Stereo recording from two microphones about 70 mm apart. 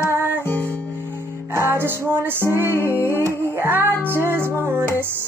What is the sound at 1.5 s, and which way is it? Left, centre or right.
Music, right.